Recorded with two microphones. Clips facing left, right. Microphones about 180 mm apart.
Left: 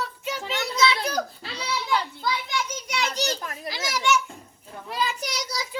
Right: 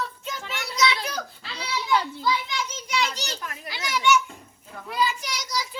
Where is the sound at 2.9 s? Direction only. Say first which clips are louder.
Left 1 dB; 45° left (ahead or behind).